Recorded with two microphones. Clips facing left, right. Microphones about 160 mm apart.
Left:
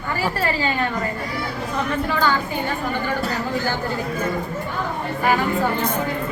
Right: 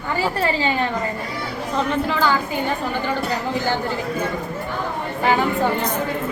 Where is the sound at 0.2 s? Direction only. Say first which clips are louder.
Right 2 dB; 25° right (ahead or behind).